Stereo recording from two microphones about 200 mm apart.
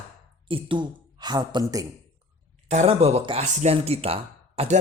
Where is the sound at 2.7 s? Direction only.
35° right (ahead or behind).